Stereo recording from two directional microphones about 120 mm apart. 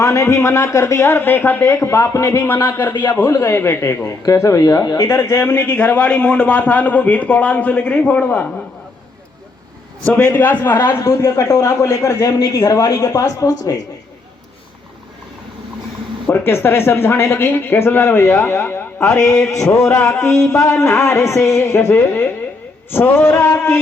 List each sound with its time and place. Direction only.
0.0 s a man's voice: 25° left (ahead or behind)
3.0 s a man's voice: 30° left (ahead or behind); by 8.6 s 15° left (ahead or behind)
10.3 s a man's voice: 15° left (ahead or behind)
16.3 s a man's voice: 20° left (ahead or behind)
19.8 s speech: 10° left (ahead or behind)
20.1 s a man's voice: 25° left (ahead or behind)